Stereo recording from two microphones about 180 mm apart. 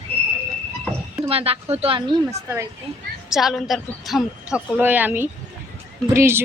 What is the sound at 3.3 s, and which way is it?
Speech, centre (ahead or behind).